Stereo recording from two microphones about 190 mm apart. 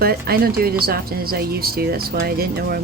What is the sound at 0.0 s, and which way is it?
Speech, 50° right (ahead or behind).